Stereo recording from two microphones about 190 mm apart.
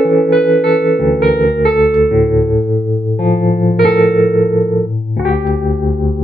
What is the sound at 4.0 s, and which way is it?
Music, 50° left (ahead or behind).